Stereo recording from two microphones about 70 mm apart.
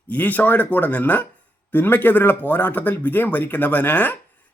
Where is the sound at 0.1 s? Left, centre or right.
Left.